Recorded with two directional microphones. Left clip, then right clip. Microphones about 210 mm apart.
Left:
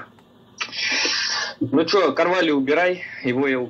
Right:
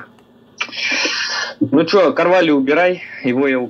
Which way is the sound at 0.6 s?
50° right (ahead or behind).